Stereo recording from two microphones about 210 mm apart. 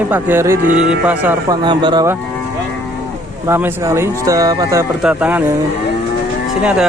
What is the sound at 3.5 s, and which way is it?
Speech, 10° right (ahead or behind).